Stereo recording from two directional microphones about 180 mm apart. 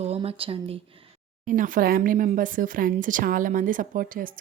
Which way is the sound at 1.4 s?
50° right (ahead or behind).